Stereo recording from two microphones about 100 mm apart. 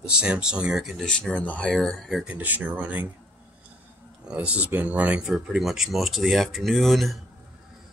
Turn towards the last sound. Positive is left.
turn(degrees=0)  # may be behind; listen again after turning